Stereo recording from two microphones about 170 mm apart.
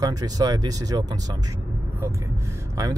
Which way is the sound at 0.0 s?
20° right (ahead or behind).